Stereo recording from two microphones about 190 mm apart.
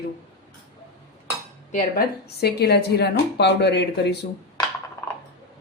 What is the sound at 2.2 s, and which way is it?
Speech, 60° left (ahead or behind).